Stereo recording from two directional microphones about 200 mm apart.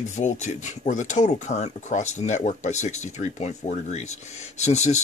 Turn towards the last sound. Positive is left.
turn(degrees=35)  # may be behind; listen again after turning